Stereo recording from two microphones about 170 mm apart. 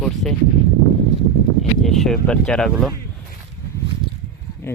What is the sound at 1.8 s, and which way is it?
Speech, centre (ahead or behind).